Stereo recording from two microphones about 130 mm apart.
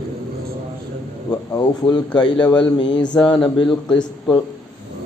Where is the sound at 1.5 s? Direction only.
30° left (ahead or behind).